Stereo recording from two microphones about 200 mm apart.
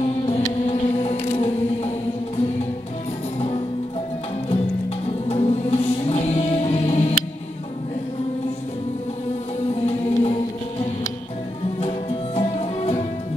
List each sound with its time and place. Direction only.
0.7 s music: 30° left (ahead or behind)
3.3 s music: 30° left (ahead or behind)
5.3 s music: 30° left (ahead or behind)
9.8 s music: 30° left (ahead or behind)
12.4 s music: 30° left (ahead or behind)